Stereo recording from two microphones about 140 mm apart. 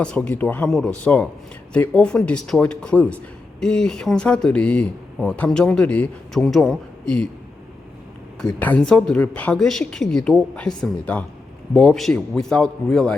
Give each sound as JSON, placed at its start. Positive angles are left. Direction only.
{"t": 0.0, "sound": "speech", "side_deg": 5}
{"t": 8.4, "sound": "speech", "side_deg": 10}